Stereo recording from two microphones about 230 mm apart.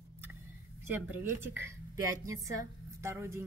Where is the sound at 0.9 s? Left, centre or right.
Centre.